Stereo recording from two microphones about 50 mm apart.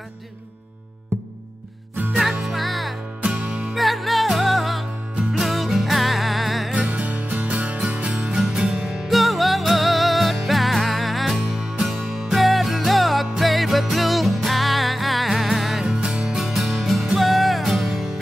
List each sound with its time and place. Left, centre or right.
2.4 s music: centre
3.2 s music: right
3.7 s music: centre
6.7 s music: right
8.4 s music: centre
9.1 s music: centre
15.8 s music: centre